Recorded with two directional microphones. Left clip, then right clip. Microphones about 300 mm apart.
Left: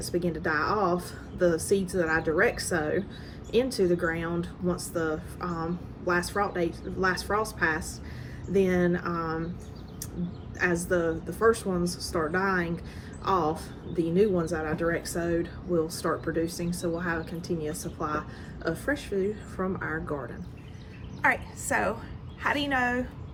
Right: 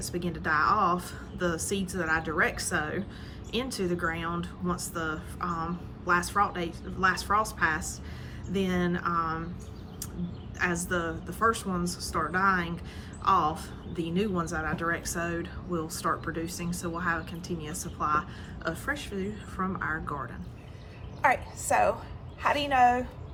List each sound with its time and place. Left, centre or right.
0.0 s speech: centre
10.6 s speech: centre
21.2 s a woman's voice: right